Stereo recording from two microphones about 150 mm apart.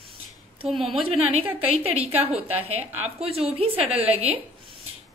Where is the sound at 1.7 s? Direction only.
40° right (ahead or behind).